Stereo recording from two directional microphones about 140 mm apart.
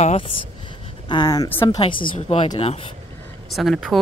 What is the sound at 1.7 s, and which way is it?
A woman's voice, 40° left (ahead or behind).